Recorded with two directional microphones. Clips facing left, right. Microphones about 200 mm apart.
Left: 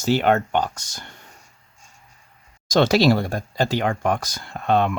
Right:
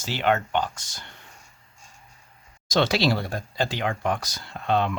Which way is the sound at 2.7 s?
45° left (ahead or behind).